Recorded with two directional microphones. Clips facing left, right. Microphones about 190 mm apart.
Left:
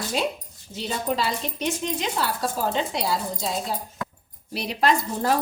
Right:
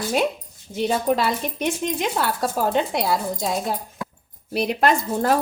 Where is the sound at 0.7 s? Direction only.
50° right (ahead or behind).